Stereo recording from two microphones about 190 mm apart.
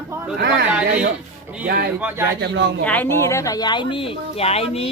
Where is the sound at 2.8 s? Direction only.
10° left (ahead or behind).